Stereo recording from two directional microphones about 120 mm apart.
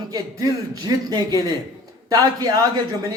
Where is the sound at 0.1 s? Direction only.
30° right (ahead or behind).